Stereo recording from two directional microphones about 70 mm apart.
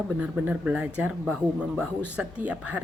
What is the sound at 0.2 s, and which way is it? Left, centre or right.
Speech, centre.